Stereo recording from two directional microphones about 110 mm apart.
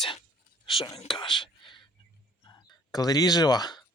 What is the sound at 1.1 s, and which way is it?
Whispering, 45° left (ahead or behind).